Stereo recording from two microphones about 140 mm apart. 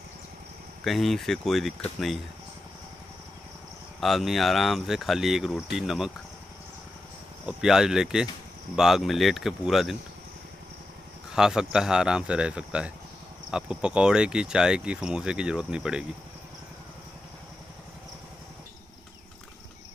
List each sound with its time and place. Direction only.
0.8 s speech: centre (ahead or behind)
4.0 s speech: centre (ahead or behind)
7.4 s speech: 5° right (ahead or behind)
11.3 s speech: 5° right (ahead or behind)